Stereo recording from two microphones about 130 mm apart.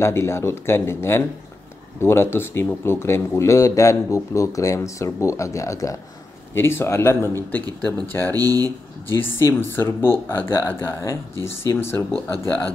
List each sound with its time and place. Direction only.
0.0 s speech: 20° left (ahead or behind)
8.4 s speech: 30° right (ahead or behind)
8.6 s speech: 15° left (ahead or behind)